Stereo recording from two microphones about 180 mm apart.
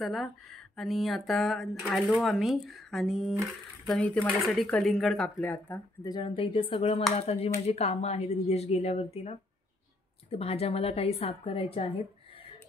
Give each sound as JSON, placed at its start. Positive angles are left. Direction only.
{"t": 0.0, "sound": "speech", "side_deg": 0}
{"t": 6.0, "sound": "speech", "side_deg": 25}